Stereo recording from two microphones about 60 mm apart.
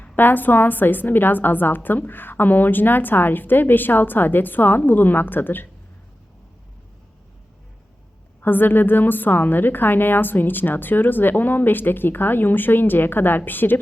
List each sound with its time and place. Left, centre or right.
0.0 s a woman's voice: left
8.4 s a woman's voice: left